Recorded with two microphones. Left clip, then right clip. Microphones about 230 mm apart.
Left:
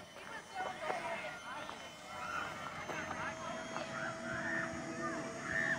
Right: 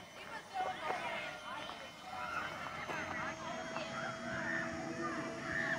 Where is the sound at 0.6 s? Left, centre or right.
Centre.